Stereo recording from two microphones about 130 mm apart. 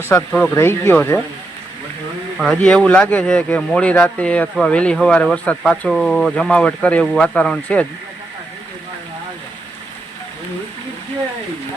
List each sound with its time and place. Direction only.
0.3 s speech: 10° left (ahead or behind)
2.4 s speech: 5° left (ahead or behind)